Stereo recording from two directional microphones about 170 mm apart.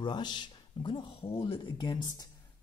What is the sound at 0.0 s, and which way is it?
A woman's voice, 25° left (ahead or behind).